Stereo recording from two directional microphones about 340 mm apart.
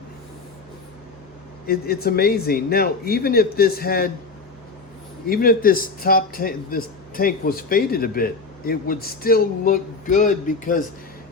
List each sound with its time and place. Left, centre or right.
1.6 s a man's voice: left
5.3 s a man's voice: left